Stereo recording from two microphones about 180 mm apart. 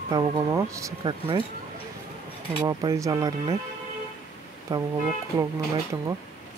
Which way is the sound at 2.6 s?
20° right (ahead or behind).